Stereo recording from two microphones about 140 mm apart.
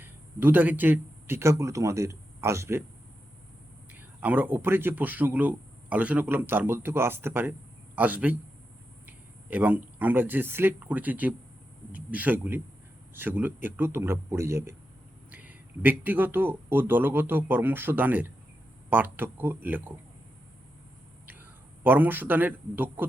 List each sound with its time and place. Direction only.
0.0 s speech: 15° right (ahead or behind)
3.9 s a man's voice: 10° right (ahead or behind)
21.8 s a man's voice: 15° right (ahead or behind)